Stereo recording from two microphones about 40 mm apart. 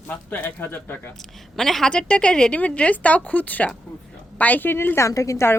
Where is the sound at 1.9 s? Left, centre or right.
Left.